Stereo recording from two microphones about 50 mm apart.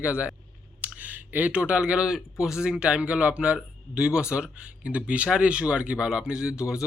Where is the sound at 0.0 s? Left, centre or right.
Right.